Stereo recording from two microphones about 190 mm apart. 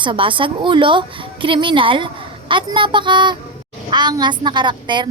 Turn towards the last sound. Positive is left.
turn(degrees=-25)  # may be behind; listen again after turning